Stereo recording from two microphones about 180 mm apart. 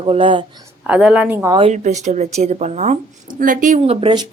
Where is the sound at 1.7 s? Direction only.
40° right (ahead or behind).